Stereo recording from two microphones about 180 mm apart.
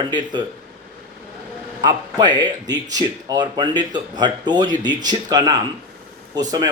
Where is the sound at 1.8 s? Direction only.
25° right (ahead or behind).